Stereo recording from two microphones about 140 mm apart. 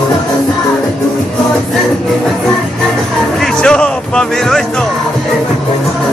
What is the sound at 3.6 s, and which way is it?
Music, 5° left (ahead or behind).